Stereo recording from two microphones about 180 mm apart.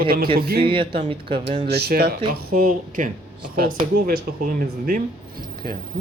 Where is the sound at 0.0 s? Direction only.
55° right (ahead or behind).